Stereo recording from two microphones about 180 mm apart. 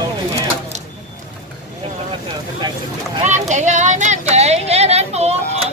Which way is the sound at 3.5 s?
40° right (ahead or behind).